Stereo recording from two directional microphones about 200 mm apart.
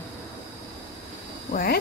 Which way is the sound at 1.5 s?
45° left (ahead or behind).